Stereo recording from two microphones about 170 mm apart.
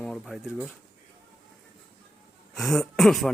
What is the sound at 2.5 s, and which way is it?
Speech, centre (ahead or behind).